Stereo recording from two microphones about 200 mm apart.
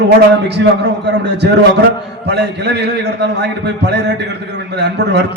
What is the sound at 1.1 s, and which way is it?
A man's voice, 60° right (ahead or behind).